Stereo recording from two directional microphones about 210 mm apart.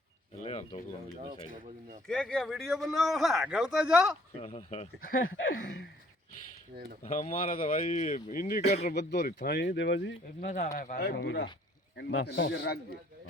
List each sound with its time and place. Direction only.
0.4 s a sound: 30° left (ahead or behind)
2.0 s a man's voice: 5° left (ahead or behind)
4.4 s speech: 30° left (ahead or behind); by 5.9 s 50° left (ahead or behind)
7.0 s a man's voice: 35° left (ahead or behind); by 10.2 s 55° left (ahead or behind)
10.4 s a man's voice: 40° left (ahead or behind); by 12.8 s 55° left (ahead or behind)